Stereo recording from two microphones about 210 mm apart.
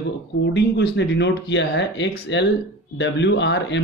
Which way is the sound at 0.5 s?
55° left (ahead or behind).